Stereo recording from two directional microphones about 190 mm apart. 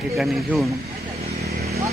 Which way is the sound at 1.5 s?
55° right (ahead or behind).